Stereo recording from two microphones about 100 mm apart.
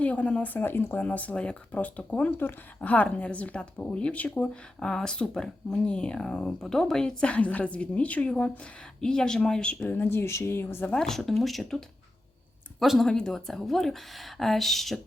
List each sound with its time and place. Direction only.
0.0 s speech: 15° left (ahead or behind)
9.8 s speech: 20° left (ahead or behind)
10.9 s speech: 5° left (ahead or behind)
12.8 s speech: 5° right (ahead or behind)